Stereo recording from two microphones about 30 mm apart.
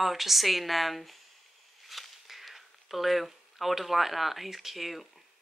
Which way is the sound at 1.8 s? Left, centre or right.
Centre.